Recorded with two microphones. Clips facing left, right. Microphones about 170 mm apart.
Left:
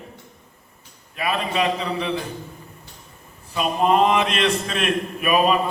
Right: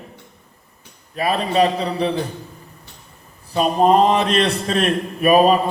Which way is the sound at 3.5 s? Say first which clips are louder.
Right 4 dB; 35° right (ahead or behind).